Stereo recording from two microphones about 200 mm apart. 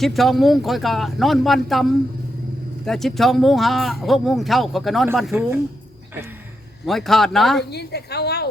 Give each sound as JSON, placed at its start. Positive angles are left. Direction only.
{"t": 0.0, "sound": "speech", "side_deg": 0}
{"t": 6.8, "sound": "speech", "side_deg": 0}
{"t": 7.6, "sound": "a woman's voice", "side_deg": 55}